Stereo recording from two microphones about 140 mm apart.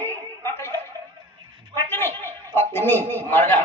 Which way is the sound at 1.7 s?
15° left (ahead or behind).